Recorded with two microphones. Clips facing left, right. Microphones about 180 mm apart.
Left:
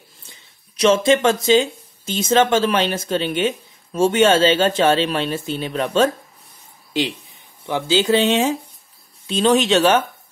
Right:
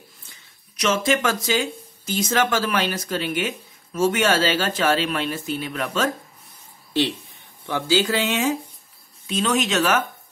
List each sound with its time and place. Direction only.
0.3 s speech: 30° left (ahead or behind)
6.9 s speech: 15° left (ahead or behind); by 10.0 s 30° left (ahead or behind)